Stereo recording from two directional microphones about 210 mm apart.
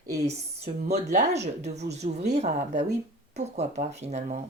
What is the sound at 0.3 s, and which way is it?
Speech, 30° right (ahead or behind).